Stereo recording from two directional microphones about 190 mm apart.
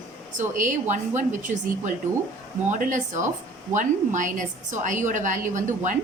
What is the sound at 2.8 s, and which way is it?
A woman's voice, 40° right (ahead or behind).